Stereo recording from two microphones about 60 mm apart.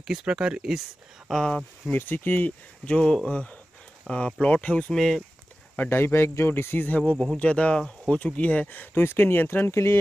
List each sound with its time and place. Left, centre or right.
0.0 s speech: centre
1.3 s speech: centre
1.9 s speech: left
2.8 s speech: centre
4.1 s speech: centre
4.4 s speech: centre
5.9 s speech: left
7.0 s speech: centre
8.9 s speech: left
9.7 s speech: left